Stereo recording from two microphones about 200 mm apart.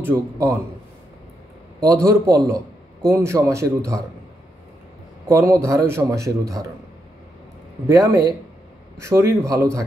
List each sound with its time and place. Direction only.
0.0 s a man's voice: 15° right (ahead or behind)
1.9 s a man's voice: 15° right (ahead or behind)
5.3 s a man's voice: 15° right (ahead or behind)
7.9 s a man's voice: 15° right (ahead or behind)